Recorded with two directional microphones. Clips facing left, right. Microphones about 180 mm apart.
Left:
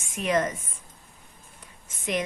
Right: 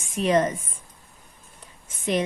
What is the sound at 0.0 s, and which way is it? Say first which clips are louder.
Speech: right 4 dB; 30° right (ahead or behind).